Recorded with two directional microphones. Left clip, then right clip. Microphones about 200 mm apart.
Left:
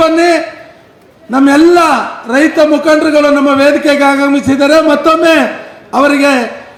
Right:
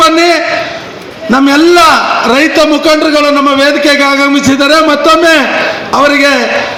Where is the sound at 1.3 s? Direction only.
60° left (ahead or behind).